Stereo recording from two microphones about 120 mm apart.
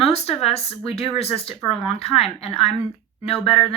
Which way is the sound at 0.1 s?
60° left (ahead or behind).